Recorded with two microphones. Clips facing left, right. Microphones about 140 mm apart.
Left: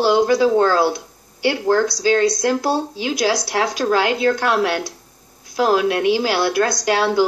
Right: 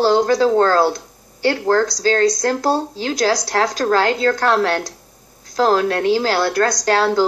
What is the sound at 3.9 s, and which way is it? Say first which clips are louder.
Speech: right 1 dB; 15° left (ahead or behind).